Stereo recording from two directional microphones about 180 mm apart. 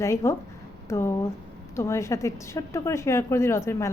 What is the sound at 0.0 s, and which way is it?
A woman's voice, 15° left (ahead or behind).